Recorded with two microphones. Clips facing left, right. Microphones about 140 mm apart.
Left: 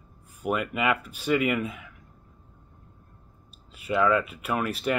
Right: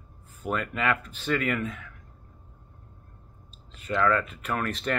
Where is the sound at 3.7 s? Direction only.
10° left (ahead or behind).